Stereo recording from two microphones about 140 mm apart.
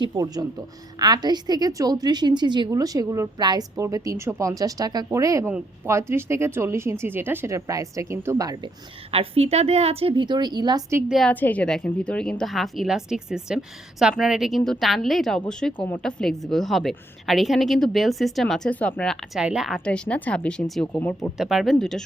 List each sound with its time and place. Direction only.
0.0 s a woman's voice: 30° right (ahead or behind)
9.1 s a woman's voice: 45° right (ahead or behind); by 10.8 s 30° right (ahead or behind)
11.1 s speech: centre (ahead or behind)
19.3 s speech: 5° right (ahead or behind)
19.8 s speech: 10° left (ahead or behind)
21.3 s speech: 5° right (ahead or behind)